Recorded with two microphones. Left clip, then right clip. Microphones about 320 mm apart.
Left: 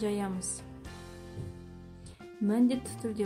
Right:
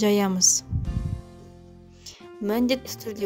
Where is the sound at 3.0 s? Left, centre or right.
Right.